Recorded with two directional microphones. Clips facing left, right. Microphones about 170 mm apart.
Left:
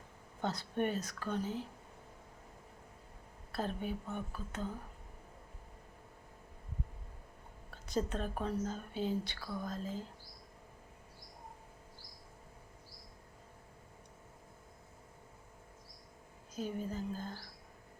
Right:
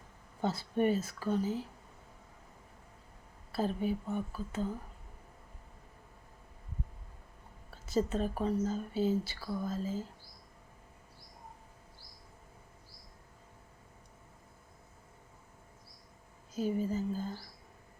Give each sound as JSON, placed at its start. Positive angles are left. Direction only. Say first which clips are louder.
{"t": 0.4, "sound": "speech", "louder": "right 5 dB", "side_deg": -5}
{"t": 3.5, "sound": "speech", "louder": "right 5 dB", "side_deg": -5}
{"t": 7.7, "sound": "speech", "louder": "right 4 dB", "side_deg": -5}
{"t": 16.6, "sound": "speech", "louder": "right 6 dB", "side_deg": -5}